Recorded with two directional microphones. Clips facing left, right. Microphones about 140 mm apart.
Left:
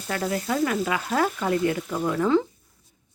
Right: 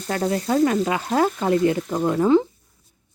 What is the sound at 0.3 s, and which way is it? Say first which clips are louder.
Speech: right 6 dB; 25° right (ahead or behind).